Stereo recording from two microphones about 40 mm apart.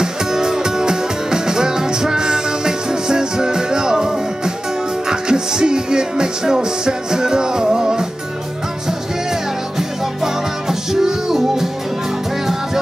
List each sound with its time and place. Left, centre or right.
0.0 s music: centre
9.3 s music: centre